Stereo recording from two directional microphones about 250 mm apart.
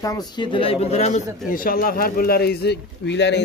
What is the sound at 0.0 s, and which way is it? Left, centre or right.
Speech, centre.